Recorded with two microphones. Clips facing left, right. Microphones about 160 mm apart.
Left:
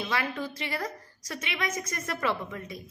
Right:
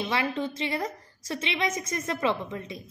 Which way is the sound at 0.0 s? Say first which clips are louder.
Right 3 dB; 25° right (ahead or behind).